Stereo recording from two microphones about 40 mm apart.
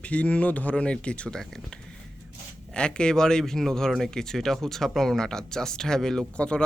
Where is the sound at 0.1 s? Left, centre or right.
Left.